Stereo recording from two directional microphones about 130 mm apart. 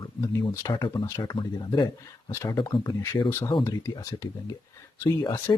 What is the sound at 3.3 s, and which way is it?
Speech, 25° left (ahead or behind).